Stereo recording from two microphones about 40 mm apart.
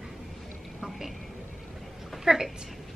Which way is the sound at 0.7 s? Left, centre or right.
Centre.